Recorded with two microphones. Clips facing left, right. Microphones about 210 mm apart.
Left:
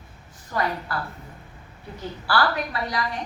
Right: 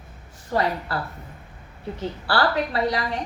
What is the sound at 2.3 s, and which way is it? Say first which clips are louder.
Speech: right 2 dB; 30° right (ahead or behind).